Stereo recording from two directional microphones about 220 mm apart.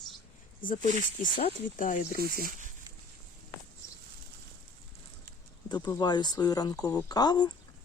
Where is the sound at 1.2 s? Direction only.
30° left (ahead or behind).